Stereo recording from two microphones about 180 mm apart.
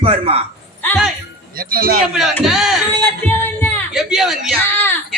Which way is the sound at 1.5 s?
55° right (ahead or behind).